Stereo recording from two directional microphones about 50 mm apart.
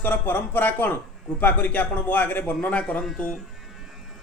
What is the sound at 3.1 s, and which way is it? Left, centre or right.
Speech, centre.